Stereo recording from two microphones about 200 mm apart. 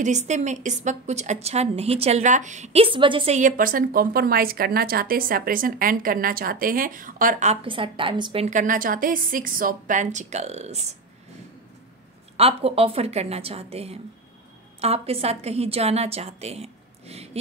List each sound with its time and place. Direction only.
0.0 s a woman's voice: 35° right (ahead or behind)
3.3 s a woman's voice: 40° right (ahead or behind)
7.6 s a woman's voice: 25° right (ahead or behind)
12.4 s a woman's voice: 30° right (ahead or behind)